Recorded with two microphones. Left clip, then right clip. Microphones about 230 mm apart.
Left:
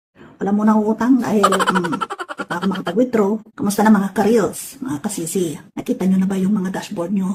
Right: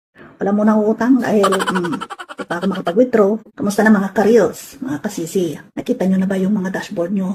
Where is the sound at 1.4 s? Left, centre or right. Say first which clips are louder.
Even; centre.